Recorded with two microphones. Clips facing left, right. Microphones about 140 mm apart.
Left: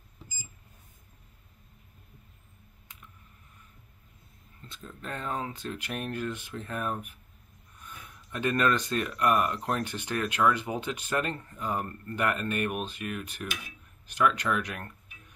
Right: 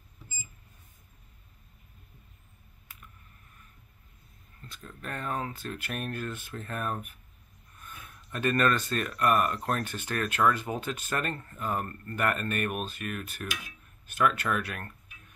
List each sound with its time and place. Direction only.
4.6 s speech: 25° left (ahead or behind)